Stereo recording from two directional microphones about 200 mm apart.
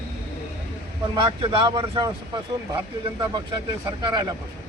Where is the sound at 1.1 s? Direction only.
25° right (ahead or behind).